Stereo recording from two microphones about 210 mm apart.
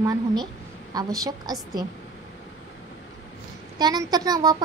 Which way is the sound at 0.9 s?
20° right (ahead or behind).